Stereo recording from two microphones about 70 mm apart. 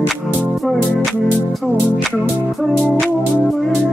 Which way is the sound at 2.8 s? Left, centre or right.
Centre.